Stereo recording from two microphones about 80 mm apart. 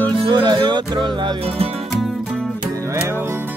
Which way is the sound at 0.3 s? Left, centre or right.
Right.